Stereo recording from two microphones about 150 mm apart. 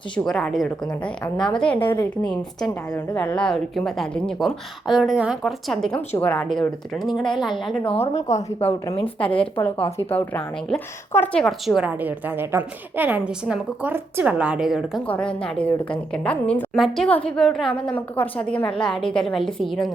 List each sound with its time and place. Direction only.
0.3 s a woman's voice: 5° left (ahead or behind)
1.8 s a woman's voice: 30° left (ahead or behind)
2.0 s a woman's voice: 10° left (ahead or behind)
7.9 s a woman's voice: 40° left (ahead or behind)
9.2 s a woman's voice: 35° left (ahead or behind)
9.8 s a woman's voice: 15° left (ahead or behind); by 15.0 s centre (ahead or behind)
15.0 s a woman's voice: 10° left (ahead or behind)